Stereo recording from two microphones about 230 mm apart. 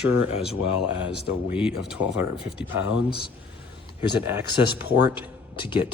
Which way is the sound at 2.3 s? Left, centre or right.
Left.